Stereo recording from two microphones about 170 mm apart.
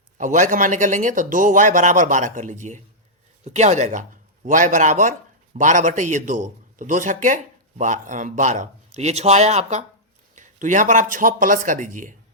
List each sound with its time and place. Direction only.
0.2 s speech: 50° right (ahead or behind)